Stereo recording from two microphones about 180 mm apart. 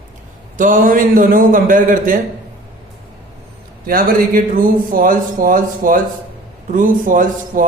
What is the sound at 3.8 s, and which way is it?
A man's voice, 50° right (ahead or behind).